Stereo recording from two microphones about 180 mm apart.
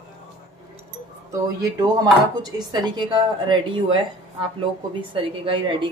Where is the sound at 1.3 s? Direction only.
20° right (ahead or behind).